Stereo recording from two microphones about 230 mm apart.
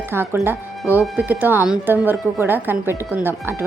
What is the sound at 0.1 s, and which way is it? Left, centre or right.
A woman's voice, centre.